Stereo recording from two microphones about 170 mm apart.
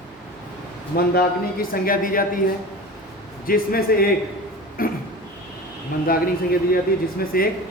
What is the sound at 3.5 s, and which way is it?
Speech, 60° left (ahead or behind).